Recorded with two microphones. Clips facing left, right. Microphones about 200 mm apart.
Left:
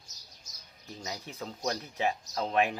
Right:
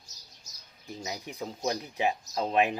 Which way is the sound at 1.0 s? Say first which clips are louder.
Right 2 dB; 15° right (ahead or behind).